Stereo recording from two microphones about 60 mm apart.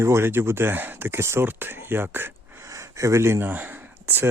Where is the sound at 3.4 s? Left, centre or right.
Right.